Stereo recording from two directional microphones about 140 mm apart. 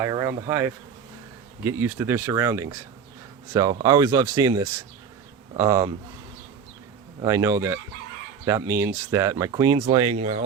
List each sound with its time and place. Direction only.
0.0 s speech: 25° right (ahead or behind)
7.2 s speech: 20° right (ahead or behind)
9.9 s speech: 35° right (ahead or behind)